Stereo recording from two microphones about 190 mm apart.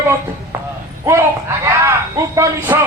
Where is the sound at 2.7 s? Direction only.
10° right (ahead or behind).